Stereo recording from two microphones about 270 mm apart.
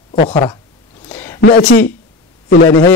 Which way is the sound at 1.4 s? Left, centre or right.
Left.